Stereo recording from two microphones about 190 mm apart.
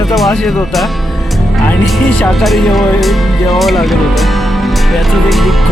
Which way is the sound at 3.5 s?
Centre (ahead or behind).